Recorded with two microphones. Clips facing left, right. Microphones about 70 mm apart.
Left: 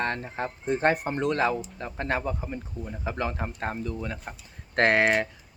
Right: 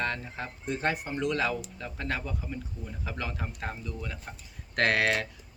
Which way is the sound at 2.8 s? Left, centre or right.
Left.